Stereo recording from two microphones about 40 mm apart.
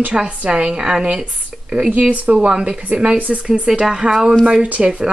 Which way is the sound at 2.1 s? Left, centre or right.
Right.